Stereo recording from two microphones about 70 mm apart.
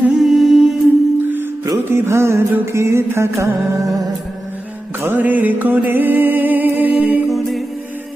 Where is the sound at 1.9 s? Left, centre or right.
Right.